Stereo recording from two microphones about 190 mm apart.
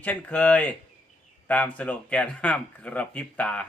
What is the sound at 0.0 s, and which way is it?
Speech, 10° left (ahead or behind).